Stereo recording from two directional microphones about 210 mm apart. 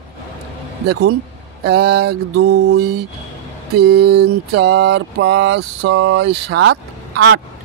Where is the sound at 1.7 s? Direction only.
50° right (ahead or behind).